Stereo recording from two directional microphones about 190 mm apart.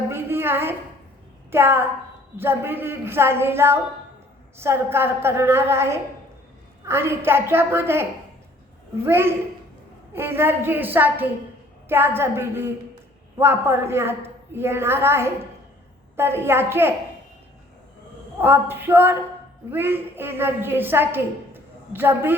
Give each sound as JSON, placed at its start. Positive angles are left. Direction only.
{"t": 0.1, "sound": "a sound", "side_deg": -10}
{"t": 1.5, "sound": "a woman's voice", "side_deg": -10}
{"t": 9.0, "sound": "a woman's voice", "side_deg": -10}
{"t": 18.3, "sound": "a woman's voice", "side_deg": -10}